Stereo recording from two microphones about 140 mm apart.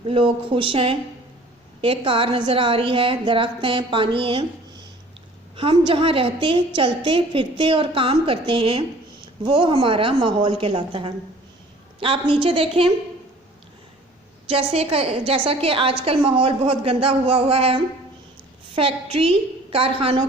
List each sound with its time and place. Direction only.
0.1 s a woman's voice: 40° right (ahead or behind)
5.5 s a woman's voice: 40° right (ahead or behind)
14.5 s a woman's voice: 45° right (ahead or behind)